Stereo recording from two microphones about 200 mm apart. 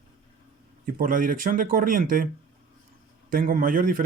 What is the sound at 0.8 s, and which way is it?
Speech, 45° right (ahead or behind).